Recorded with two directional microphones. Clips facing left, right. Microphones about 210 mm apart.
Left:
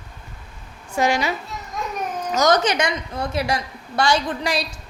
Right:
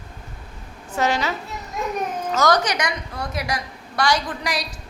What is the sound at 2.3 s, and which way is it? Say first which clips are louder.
A woman's voice: left 2 dB; 20° left (ahead or behind).